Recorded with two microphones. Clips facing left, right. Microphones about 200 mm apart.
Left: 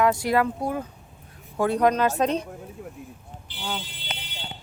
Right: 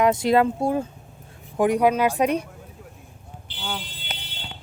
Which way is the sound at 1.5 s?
15° right (ahead or behind).